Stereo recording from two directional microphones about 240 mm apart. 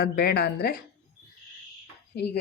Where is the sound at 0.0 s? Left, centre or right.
Left.